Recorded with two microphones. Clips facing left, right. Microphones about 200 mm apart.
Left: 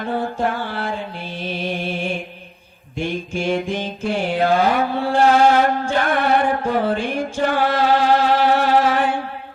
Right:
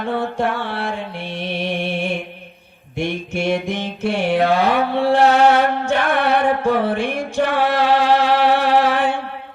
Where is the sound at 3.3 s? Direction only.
70° right (ahead or behind).